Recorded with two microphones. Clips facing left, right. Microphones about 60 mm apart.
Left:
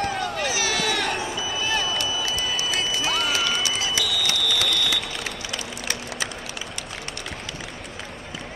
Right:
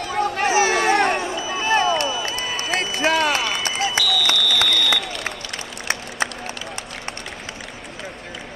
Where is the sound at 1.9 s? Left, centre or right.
Right.